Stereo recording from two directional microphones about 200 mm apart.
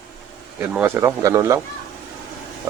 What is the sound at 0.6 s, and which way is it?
Speech, 10° right (ahead or behind).